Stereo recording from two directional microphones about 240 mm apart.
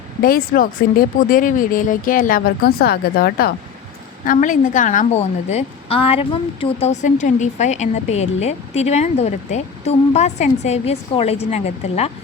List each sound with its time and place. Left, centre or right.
0.2 s a woman's voice: left